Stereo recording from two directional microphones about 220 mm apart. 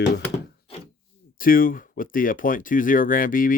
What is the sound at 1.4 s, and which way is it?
Speech, 40° left (ahead or behind).